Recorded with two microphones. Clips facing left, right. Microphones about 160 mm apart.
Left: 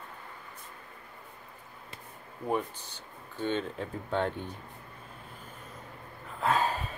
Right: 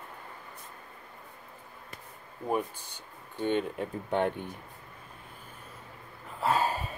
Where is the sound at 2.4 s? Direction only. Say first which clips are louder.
Right 1 dB; 10° right (ahead or behind).